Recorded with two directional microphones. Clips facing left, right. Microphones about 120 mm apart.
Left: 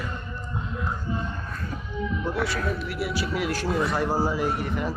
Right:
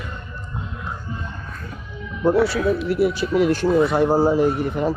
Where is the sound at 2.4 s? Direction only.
Centre (ahead or behind).